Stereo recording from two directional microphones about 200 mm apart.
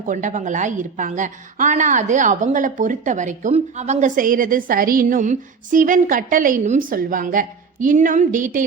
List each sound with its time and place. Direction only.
0.0 s a woman's voice: 40° right (ahead or behind)